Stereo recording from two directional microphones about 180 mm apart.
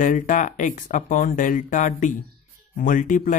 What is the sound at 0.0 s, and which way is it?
Speech, 45° left (ahead or behind).